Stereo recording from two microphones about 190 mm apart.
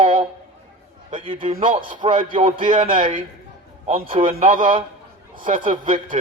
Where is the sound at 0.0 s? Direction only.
30° right (ahead or behind).